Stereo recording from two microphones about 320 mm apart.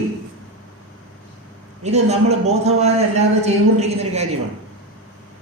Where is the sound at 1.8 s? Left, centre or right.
Right.